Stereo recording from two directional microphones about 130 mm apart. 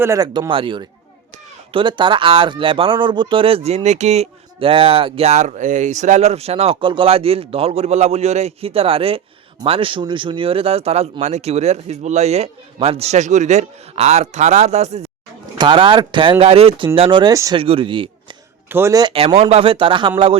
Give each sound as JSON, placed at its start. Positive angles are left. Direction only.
{"t": 0.0, "sound": "speech", "side_deg": -25}
{"t": 0.5, "sound": "speech", "side_deg": -40}
{"t": 3.8, "sound": "speech", "side_deg": -60}
{"t": 15.5, "sound": "speech", "side_deg": -40}
{"t": 17.3, "sound": "speech", "side_deg": -25}
{"t": 17.6, "sound": "a man's voice", "side_deg": -45}
{"t": 18.7, "sound": "speech", "side_deg": -20}
{"t": 19.4, "sound": "speech", "side_deg": -50}